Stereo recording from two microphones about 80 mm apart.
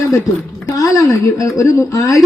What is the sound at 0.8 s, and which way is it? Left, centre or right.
A man's voice, left.